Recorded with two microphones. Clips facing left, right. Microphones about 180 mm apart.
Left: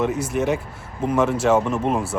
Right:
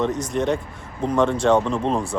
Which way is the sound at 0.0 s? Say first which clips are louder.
Left 1 dB; 5° left (ahead or behind).